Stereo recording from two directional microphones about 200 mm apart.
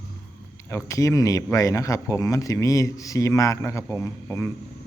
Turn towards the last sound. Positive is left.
turn(degrees=15)  # may be behind; listen again after turning